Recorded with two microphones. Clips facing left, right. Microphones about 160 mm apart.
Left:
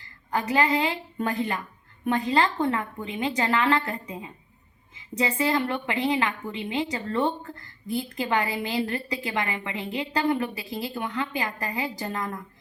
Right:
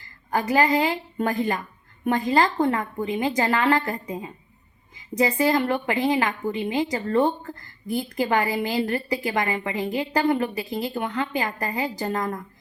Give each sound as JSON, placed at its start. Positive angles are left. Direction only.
{"t": 0.3, "sound": "a woman's voice", "side_deg": -40}